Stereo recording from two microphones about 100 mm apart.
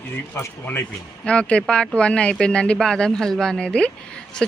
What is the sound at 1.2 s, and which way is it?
A woman's voice, 10° left (ahead or behind).